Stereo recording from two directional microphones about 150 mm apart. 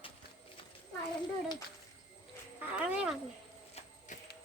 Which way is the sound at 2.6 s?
10° right (ahead or behind).